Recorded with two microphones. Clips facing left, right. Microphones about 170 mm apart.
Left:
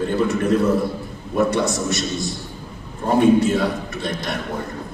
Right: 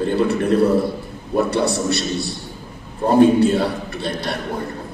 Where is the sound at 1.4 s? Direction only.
35° right (ahead or behind).